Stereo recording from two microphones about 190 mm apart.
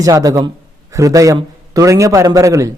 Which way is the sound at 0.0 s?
20° right (ahead or behind).